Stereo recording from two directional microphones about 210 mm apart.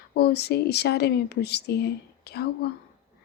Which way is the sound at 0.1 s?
50° left (ahead or behind).